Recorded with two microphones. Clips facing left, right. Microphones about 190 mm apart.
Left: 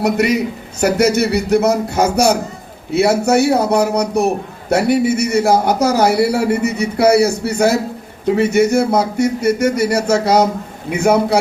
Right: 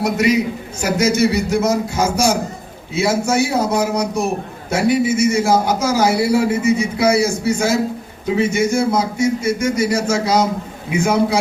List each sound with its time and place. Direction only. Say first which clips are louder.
0.0 s a man's voice: left 1 dB; 60° left (ahead or behind)